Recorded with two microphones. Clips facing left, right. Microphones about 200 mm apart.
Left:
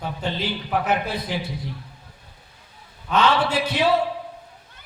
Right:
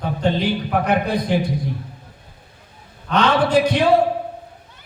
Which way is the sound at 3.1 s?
5° left (ahead or behind).